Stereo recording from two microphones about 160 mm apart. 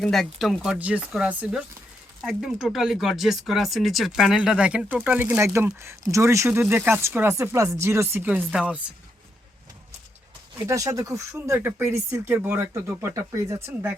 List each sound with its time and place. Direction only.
0.0 s speech: centre (ahead or behind)
10.7 s speech: 20° right (ahead or behind)